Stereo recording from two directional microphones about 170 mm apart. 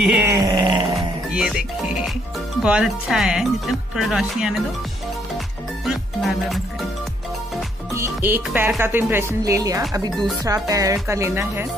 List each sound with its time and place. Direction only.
0.0 s a sound: 10° right (ahead or behind)
1.3 s speech: centre (ahead or behind)
2.6 s speech: 5° right (ahead or behind)
5.9 s music: centre (ahead or behind)
7.9 s speech: 15° right (ahead or behind)